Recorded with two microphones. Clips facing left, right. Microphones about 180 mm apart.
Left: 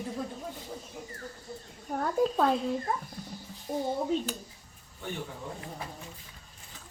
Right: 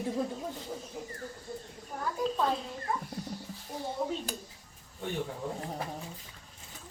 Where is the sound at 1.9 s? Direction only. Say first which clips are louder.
Left 7 dB; 60° left (ahead or behind).